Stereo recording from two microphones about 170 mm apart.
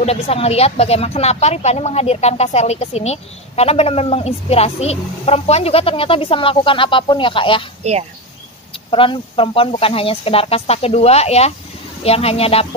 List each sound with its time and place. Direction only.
0.0 s speech: 35° left (ahead or behind)
7.8 s speech: 40° right (ahead or behind)
8.9 s speech: 30° left (ahead or behind)